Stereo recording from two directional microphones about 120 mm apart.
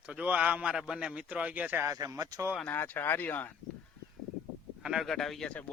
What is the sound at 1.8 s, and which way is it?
Speech, 25° right (ahead or behind).